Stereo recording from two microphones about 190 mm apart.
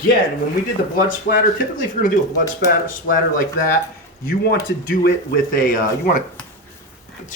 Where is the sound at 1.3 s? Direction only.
45° left (ahead or behind).